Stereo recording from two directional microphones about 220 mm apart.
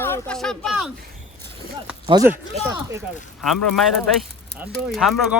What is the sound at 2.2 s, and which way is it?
Speech, 15° right (ahead or behind).